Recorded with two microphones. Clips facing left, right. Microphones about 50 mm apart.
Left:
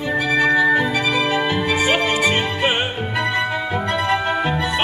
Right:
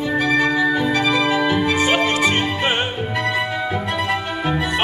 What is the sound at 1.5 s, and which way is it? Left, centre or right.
Music, centre.